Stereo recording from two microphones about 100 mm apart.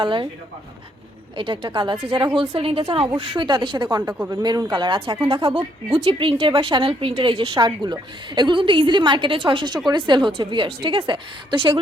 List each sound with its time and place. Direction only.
0.0 s a woman's voice: 55° right (ahead or behind)
1.4 s a woman's voice: 55° right (ahead or behind)